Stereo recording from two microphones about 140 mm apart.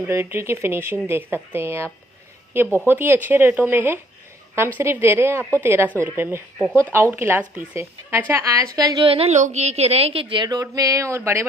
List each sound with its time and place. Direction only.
0.1 s speech: 20° right (ahead or behind)
5.4 s speech: 15° left (ahead or behind)
5.6 s a woman's voice: 15° right (ahead or behind)
9.0 s a woman's voice: 45° right (ahead or behind); by 11.4 s 20° right (ahead or behind)